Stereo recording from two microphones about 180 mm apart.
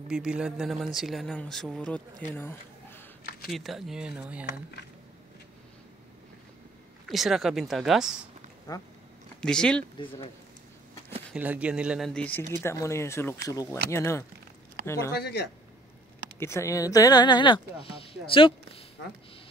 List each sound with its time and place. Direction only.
0.1 s speech: 5° right (ahead or behind); by 3.0 s 10° left (ahead or behind)
3.4 s speech: centre (ahead or behind)
7.1 s speech: centre (ahead or behind)
8.7 s speech: 20° left (ahead or behind)
9.4 s speech: 5° left (ahead or behind)
9.9 s speech: 30° left (ahead or behind)
11.3 s speech: 10° right (ahead or behind); by 14.2 s 15° left (ahead or behind)
16.3 s speech: 15° left (ahead or behind); by 18.9 s 30° left (ahead or behind)